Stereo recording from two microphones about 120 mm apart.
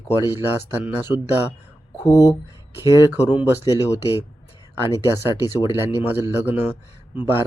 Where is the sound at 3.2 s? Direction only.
15° right (ahead or behind).